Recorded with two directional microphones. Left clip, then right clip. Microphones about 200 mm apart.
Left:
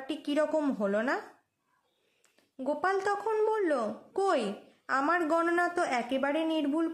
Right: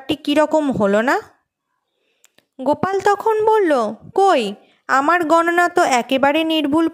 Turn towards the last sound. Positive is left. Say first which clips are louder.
# right 13 dB
turn(degrees=-45)  # may be behind; listen again after turning